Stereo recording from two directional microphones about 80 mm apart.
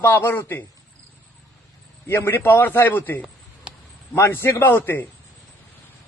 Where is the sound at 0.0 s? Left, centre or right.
Left.